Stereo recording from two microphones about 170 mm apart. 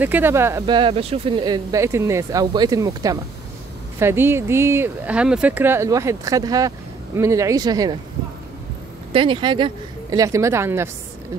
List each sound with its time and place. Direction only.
0.0 s speech: 10° right (ahead or behind)
0.7 s speech: 30° right (ahead or behind)
9.1 s speech: 30° right (ahead or behind); by 10.9 s 15° right (ahead or behind)